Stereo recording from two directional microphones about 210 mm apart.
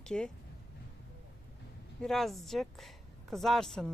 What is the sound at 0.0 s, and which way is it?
Speech, 5° left (ahead or behind).